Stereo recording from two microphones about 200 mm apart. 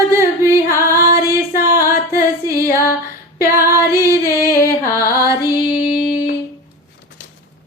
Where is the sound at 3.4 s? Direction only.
15° right (ahead or behind).